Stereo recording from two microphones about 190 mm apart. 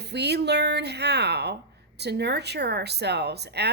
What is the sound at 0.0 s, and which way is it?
Speech, 60° right (ahead or behind).